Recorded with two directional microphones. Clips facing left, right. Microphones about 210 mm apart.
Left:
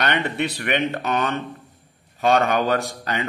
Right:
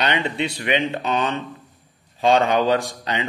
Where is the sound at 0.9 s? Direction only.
25° right (ahead or behind).